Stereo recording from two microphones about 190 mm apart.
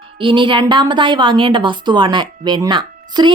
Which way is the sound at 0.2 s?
25° right (ahead or behind).